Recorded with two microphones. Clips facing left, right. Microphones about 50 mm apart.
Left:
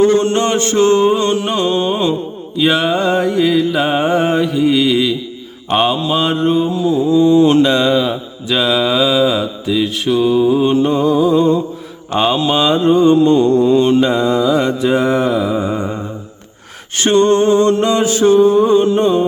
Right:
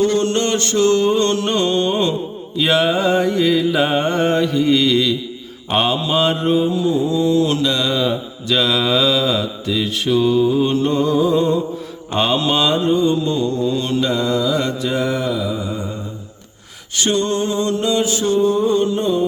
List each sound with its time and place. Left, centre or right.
0.0 s mantra: left
7.3 s mantra: left
7.9 s mantra: centre
12.9 s mantra: left
17.0 s a capella: left
18.4 s mantra: left
18.9 s a capella: left